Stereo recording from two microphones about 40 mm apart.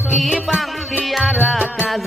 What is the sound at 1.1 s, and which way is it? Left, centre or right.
Music, centre.